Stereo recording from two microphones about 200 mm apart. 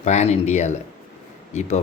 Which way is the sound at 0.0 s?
35° left (ahead or behind).